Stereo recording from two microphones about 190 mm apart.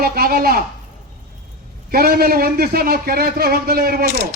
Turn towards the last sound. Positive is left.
turn(degrees=-50)  # may be behind; listen again after turning